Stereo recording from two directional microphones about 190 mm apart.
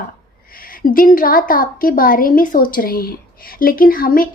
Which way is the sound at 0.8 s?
45° left (ahead or behind).